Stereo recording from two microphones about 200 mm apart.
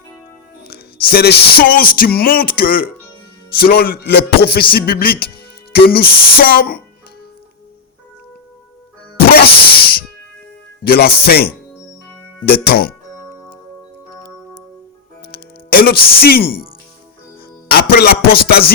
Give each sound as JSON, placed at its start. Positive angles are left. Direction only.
{"t": 0.6, "sound": "music", "side_deg": 50}
{"t": 9.3, "sound": "music", "side_deg": 50}
{"t": 15.3, "sound": "music", "side_deg": 50}
{"t": 17.7, "sound": "music", "side_deg": 50}